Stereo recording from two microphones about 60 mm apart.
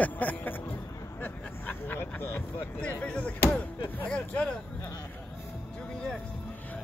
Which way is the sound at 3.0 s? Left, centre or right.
Left.